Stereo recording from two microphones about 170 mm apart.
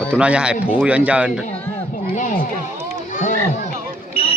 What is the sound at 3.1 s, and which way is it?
Children playing, 45° left (ahead or behind).